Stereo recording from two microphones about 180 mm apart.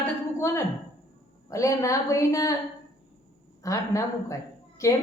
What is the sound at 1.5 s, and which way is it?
A woman's voice, 15° left (ahead or behind).